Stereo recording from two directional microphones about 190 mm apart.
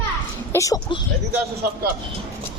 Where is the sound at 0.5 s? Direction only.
15° left (ahead or behind).